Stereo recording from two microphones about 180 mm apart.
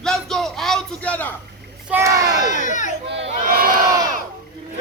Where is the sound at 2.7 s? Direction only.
45° left (ahead or behind).